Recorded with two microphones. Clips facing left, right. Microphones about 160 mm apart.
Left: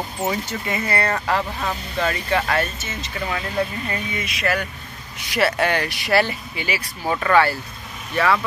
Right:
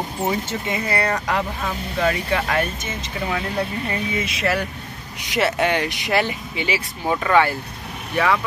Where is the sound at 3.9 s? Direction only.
25° right (ahead or behind).